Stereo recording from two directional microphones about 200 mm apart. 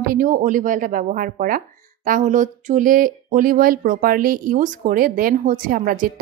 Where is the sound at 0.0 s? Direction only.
45° right (ahead or behind).